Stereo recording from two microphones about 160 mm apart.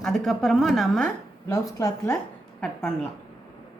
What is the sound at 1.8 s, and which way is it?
Speech, 20° left (ahead or behind).